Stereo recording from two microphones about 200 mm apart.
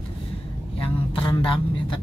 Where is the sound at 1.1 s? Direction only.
25° left (ahead or behind).